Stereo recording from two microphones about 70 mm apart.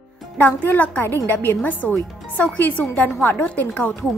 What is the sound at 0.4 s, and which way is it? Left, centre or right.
A woman's voice, left.